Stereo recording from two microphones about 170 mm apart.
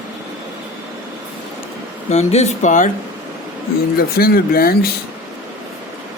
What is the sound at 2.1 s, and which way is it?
Speech, 40° left (ahead or behind).